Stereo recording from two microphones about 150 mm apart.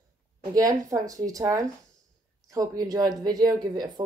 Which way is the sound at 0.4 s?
25° right (ahead or behind).